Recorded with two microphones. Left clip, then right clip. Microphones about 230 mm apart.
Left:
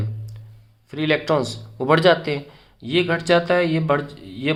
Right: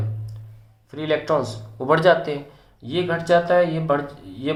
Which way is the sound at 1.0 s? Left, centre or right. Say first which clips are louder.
Left 1 dB; left.